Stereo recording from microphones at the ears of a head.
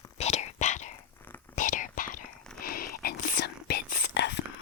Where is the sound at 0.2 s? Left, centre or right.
Left.